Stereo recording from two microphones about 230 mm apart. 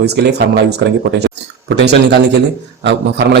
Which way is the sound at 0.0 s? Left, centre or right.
Right.